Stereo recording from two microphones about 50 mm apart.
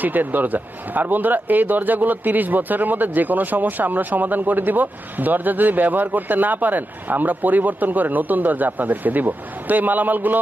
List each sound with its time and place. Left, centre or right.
0.0 s speech: right